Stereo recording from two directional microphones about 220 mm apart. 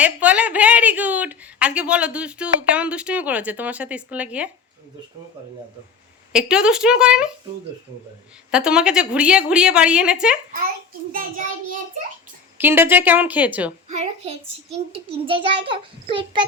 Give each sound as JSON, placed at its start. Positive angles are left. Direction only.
{"t": 0.0, "sound": "a woman's voice", "side_deg": -5}
{"t": 6.3, "sound": "a woman's voice", "side_deg": -5}
{"t": 8.4, "sound": "a woman's voice", "side_deg": -5}
{"t": 11.1, "sound": "child singing", "side_deg": -35}
{"t": 12.5, "sound": "a woman's voice", "side_deg": -10}
{"t": 13.8, "sound": "a child's voice", "side_deg": -30}